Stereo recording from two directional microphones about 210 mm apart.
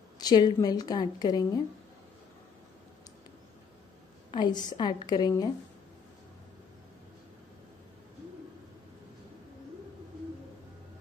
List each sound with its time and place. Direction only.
0.2 s a woman's voice: 20° left (ahead or behind)
4.3 s a woman's voice: 20° left (ahead or behind)